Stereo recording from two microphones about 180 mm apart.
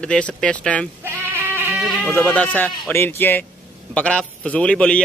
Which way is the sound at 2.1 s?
10° left (ahead or behind).